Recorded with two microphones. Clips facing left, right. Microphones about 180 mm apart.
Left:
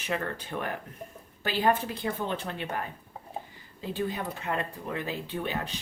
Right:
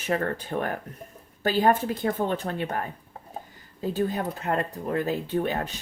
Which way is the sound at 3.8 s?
45° right (ahead or behind).